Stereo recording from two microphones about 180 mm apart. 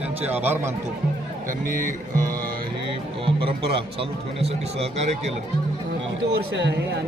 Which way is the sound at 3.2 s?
30° right (ahead or behind).